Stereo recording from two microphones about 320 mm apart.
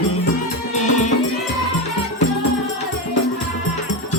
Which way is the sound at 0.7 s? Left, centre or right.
Left.